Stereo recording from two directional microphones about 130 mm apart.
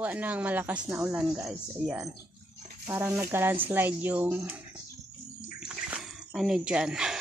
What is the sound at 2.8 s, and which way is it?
Speech, 20° right (ahead or behind).